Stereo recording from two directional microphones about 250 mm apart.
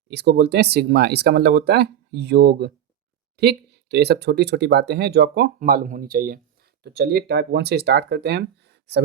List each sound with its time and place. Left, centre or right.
0.1 s speech: right